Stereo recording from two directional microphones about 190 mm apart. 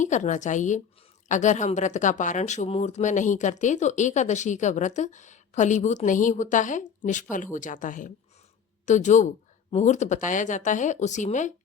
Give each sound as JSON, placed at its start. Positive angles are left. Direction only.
{"t": 0.0, "sound": "speech", "side_deg": 40}